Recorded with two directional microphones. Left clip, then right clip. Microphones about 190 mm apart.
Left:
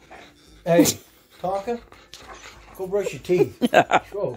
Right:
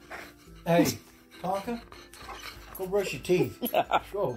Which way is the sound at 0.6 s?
55° left (ahead or behind).